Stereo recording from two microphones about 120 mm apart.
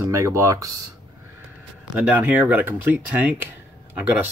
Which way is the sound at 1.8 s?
10° right (ahead or behind).